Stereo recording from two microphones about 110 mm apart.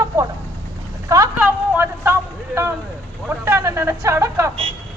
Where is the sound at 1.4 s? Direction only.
20° right (ahead or behind).